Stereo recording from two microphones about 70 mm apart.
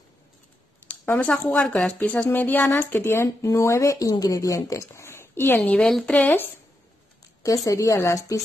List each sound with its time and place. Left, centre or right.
1.1 s a woman's voice: centre; by 4.1 s left
4.1 s a woman's voice: left
5.8 s a woman's voice: centre
6.1 s speech: left
7.4 s speech: left